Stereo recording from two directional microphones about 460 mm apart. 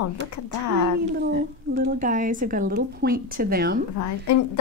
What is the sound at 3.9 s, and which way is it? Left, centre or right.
Speech, left.